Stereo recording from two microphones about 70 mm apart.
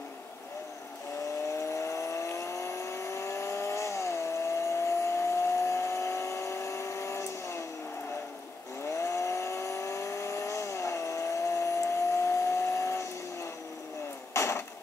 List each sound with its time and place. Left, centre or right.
1.7 s vehicle: left
8.9 s vehicle: left
14.3 s a sound: left